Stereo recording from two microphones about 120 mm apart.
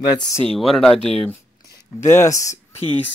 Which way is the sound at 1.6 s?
25° left (ahead or behind).